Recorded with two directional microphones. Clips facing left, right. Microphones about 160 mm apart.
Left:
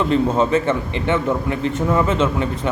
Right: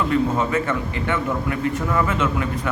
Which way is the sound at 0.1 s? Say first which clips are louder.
Left 4 dB; 25° left (ahead or behind).